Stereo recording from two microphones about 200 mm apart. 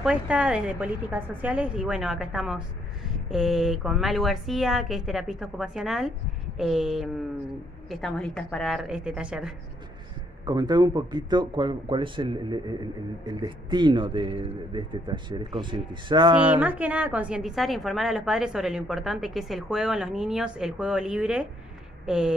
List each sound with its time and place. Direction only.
0.0 s a woman's voice: 5° right (ahead or behind)
10.4 s a man's voice: 20° right (ahead or behind)
16.5 s a woman's voice: 10° right (ahead or behind)